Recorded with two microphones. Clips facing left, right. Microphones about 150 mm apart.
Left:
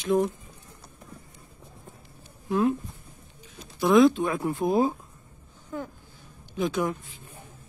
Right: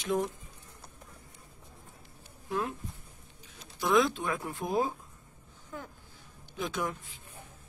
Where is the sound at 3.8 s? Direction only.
25° left (ahead or behind).